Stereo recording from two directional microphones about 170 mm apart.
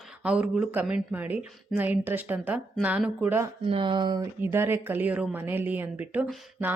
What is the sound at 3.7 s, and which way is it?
Speech, 30° right (ahead or behind).